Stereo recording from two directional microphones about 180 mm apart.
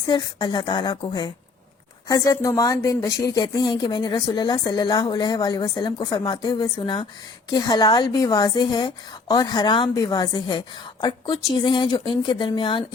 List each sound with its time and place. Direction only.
0.1 s speech: 25° left (ahead or behind)